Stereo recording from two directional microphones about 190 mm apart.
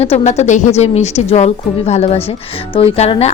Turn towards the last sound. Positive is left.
turn(degrees=35)  # may be behind; listen again after turning